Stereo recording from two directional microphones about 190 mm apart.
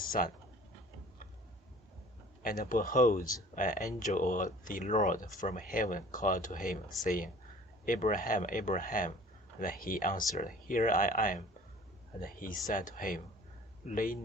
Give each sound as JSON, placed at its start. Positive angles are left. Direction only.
{"t": 0.2, "sound": "speech", "side_deg": 45}
{"t": 2.4, "sound": "speech", "side_deg": 50}